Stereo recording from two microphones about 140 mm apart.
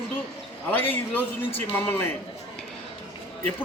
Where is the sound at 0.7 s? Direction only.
15° left (ahead or behind).